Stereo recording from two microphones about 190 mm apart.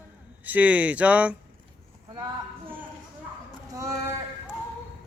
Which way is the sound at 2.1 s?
20° right (ahead or behind).